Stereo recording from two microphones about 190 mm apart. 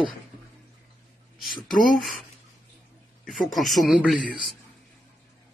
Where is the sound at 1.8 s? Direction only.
Centre (ahead or behind).